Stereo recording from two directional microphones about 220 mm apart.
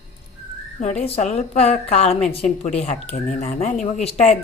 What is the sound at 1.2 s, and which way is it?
Speech, 30° left (ahead or behind).